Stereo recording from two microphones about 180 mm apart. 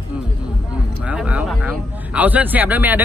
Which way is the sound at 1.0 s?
5° right (ahead or behind).